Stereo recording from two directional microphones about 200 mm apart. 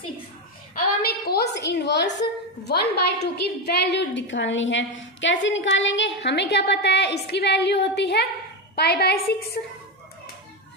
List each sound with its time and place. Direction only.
0.8 s a woman's voice: 50° left (ahead or behind)